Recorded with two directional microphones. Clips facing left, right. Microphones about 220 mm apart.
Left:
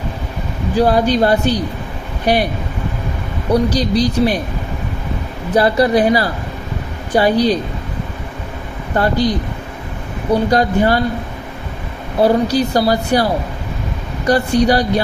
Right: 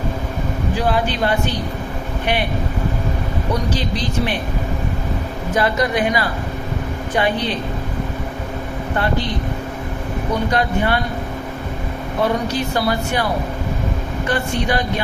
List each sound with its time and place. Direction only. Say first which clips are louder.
0.8 s speech: left 8 dB; 40° left (ahead or behind)
3.5 s speech: left 9 dB; 35° left (ahead or behind)
5.5 s speech: left 6 dB; 35° left (ahead or behind)
9.0 s speech: left 6 dB; 40° left (ahead or behind)
10.5 s speech: left 4 dB; 40° left (ahead or behind)
12.2 s speech: left 7 dB; 35° left (ahead or behind)
14.3 s speech: left 8 dB; 40° left (ahead or behind)